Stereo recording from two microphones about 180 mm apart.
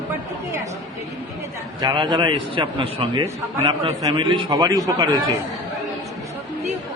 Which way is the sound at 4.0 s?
20° right (ahead or behind).